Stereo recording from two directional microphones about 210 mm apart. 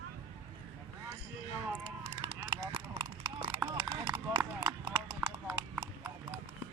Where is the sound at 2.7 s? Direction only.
20° right (ahead or behind).